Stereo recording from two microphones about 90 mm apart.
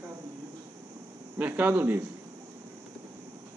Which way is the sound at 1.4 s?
20° right (ahead or behind).